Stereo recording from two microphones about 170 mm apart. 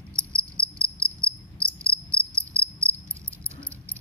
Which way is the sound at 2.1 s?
10° left (ahead or behind).